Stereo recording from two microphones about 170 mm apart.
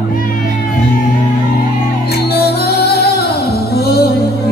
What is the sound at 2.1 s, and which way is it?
Music, 70° left (ahead or behind).